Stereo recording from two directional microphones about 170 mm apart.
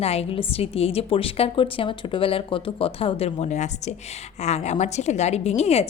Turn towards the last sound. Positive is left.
turn(degrees=40)  # may be behind; listen again after turning